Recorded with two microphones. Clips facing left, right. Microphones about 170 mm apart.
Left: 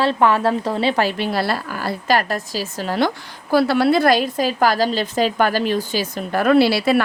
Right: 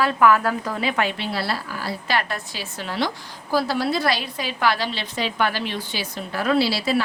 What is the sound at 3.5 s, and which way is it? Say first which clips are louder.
A woman's voice: left 7 dB; 65° left (ahead or behind).